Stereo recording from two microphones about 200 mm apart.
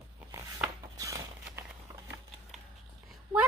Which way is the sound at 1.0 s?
15° right (ahead or behind).